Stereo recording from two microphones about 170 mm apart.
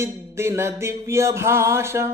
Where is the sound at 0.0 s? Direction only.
15° right (ahead or behind).